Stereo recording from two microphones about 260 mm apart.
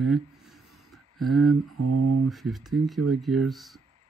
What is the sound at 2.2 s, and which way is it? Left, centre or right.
Speech, centre.